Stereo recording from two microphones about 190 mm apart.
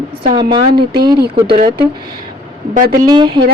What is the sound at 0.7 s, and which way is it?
Speech, 55° right (ahead or behind).